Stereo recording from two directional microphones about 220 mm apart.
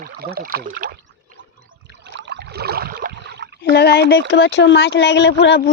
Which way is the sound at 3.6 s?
45° left (ahead or behind).